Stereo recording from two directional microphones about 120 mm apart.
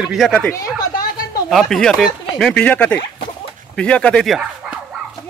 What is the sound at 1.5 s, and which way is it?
Speech, centre (ahead or behind).